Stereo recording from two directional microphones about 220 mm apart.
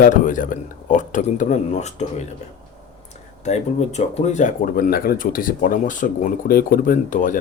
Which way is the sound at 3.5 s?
30° left (ahead or behind).